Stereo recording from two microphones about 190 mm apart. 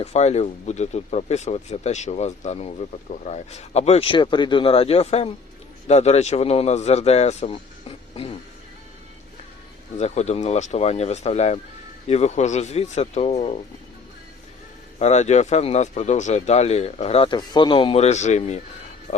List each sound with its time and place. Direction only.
0.0 s speech: 35° left (ahead or behind)
10.0 s speech: 35° left (ahead or behind)
14.9 s speech: 35° left (ahead or behind)